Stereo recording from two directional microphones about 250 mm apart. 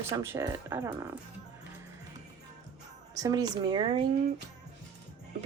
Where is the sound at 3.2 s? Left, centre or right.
Centre.